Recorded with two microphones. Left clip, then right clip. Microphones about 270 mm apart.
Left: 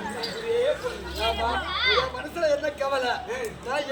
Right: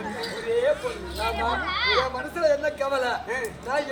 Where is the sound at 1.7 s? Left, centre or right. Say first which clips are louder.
Left 1 dB; centre.